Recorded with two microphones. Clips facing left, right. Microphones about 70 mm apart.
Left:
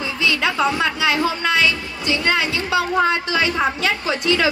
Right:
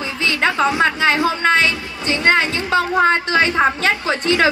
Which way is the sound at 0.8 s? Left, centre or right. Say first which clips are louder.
Right 3 dB; right.